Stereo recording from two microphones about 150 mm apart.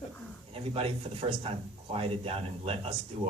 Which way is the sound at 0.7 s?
40° right (ahead or behind).